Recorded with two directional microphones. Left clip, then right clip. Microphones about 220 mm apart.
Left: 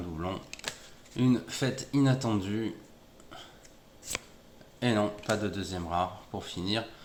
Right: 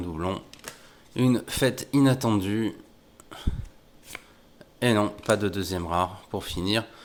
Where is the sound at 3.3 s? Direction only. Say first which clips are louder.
Right 5 dB; 55° right (ahead or behind).